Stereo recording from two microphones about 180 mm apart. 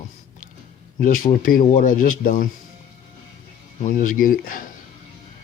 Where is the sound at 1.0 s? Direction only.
45° left (ahead or behind).